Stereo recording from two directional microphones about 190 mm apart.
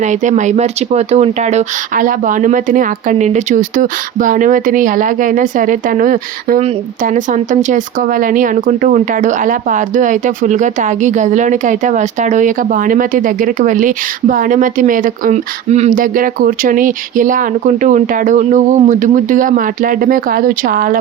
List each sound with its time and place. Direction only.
0.0 s speech: 40° right (ahead or behind)